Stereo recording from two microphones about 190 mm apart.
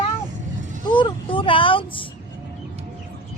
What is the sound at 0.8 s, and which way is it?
Speech, 25° left (ahead or behind).